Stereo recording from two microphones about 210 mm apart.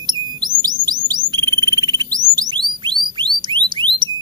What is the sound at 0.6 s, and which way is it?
Music, 20° right (ahead or behind).